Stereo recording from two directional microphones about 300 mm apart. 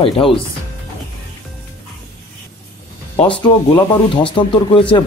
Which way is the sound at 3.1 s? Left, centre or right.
Centre.